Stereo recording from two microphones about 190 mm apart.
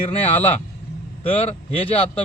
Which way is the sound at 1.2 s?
30° left (ahead or behind).